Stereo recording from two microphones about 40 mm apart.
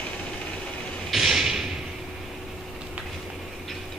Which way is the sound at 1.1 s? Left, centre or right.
Centre.